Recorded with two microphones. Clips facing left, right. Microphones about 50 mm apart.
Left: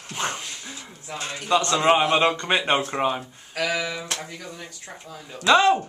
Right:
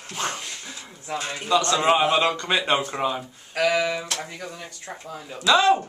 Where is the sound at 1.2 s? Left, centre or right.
Left.